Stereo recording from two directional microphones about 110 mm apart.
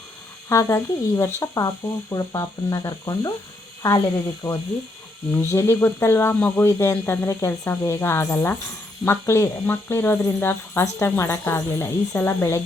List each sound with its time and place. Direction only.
0.4 s speech: 30° left (ahead or behind)
4.4 s speech: 5° left (ahead or behind)
5.3 s speech: 25° left (ahead or behind)